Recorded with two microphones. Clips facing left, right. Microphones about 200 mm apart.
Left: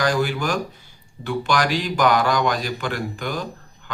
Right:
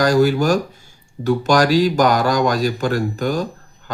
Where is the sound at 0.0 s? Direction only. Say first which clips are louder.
Right 7 dB; 40° right (ahead or behind).